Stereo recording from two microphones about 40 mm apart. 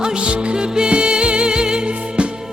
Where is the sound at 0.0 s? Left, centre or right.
Right.